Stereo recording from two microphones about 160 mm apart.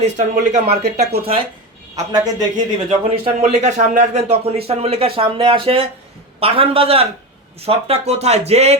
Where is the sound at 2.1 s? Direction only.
25° right (ahead or behind).